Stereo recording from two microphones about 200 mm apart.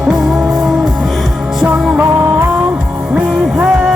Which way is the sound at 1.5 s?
5° right (ahead or behind).